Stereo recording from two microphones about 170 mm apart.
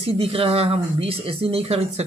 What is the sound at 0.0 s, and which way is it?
Speech, 35° right (ahead or behind).